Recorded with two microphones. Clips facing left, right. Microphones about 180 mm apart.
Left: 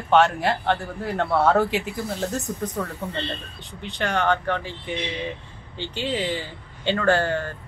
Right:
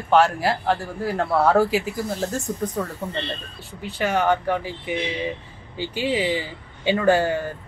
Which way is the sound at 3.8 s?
5° right (ahead or behind).